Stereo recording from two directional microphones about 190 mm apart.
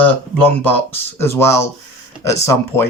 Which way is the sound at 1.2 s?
15° left (ahead or behind).